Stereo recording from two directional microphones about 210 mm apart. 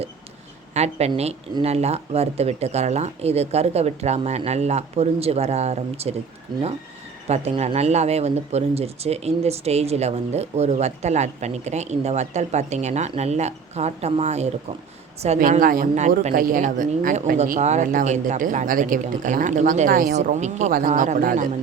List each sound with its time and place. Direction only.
0.7 s speech: 30° right (ahead or behind)
7.3 s speech: 30° right (ahead or behind)